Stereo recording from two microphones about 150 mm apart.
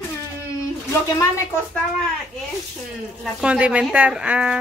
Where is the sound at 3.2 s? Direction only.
5° right (ahead or behind).